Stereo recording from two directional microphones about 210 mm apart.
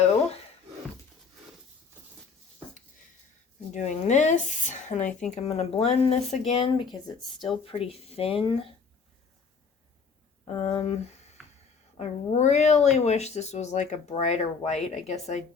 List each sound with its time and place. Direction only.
3.7 s a sound: 35° left (ahead or behind)
5.3 s speech: 30° left (ahead or behind)
10.4 s speech: 30° left (ahead or behind)
11.9 s speech: 30° left (ahead or behind)